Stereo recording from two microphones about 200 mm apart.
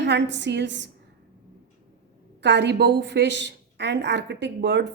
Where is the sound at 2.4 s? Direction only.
60° right (ahead or behind).